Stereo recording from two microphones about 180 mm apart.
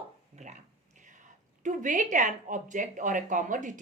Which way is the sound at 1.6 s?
45° right (ahead or behind).